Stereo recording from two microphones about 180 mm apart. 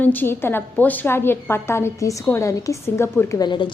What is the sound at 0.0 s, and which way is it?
A woman's voice, 10° left (ahead or behind).